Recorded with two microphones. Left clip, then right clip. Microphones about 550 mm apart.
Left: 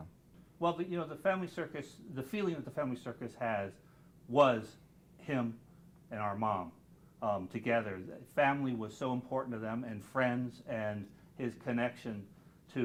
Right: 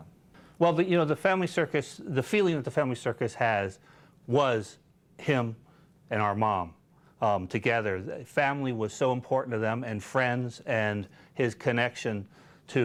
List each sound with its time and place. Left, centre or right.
0.6 s speech: right